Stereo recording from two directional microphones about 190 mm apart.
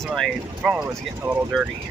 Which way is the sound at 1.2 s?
15° right (ahead or behind).